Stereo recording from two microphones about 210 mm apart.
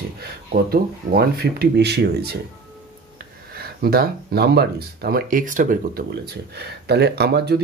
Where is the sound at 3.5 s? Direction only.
45° right (ahead or behind).